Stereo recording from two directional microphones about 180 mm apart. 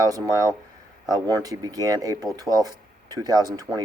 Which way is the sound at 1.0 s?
20° right (ahead or behind).